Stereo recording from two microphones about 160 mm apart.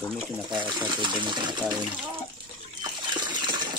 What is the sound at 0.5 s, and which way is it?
Speech, 30° right (ahead or behind).